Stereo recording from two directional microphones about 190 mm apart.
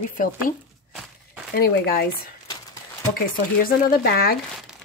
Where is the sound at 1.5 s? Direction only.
55° left (ahead or behind).